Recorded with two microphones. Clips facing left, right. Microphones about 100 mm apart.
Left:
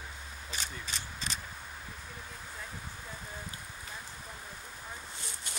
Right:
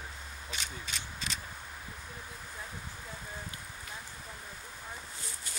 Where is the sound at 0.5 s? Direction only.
35° left (ahead or behind).